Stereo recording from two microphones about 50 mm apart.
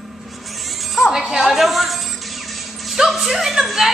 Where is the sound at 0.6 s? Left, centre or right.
Centre.